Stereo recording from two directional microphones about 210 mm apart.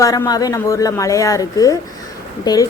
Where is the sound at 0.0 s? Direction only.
15° left (ahead or behind).